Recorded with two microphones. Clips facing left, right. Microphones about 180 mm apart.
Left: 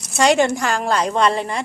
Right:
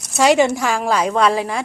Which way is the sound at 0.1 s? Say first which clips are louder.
Right 2 dB; 5° right (ahead or behind).